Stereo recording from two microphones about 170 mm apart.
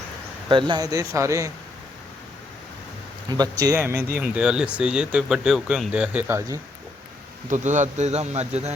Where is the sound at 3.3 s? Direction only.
25° right (ahead or behind).